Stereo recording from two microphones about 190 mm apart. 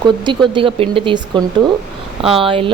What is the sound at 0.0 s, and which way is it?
Speech, 25° right (ahead or behind).